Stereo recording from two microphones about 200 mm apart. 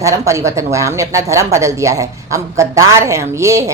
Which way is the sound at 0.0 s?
15° right (ahead or behind).